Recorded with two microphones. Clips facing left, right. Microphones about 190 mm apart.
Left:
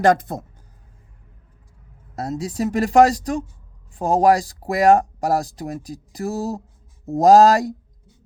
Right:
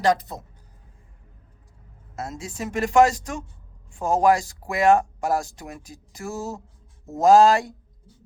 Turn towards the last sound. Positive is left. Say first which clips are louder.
# left 3 dB
turn(degrees=40)  # may be behind; listen again after turning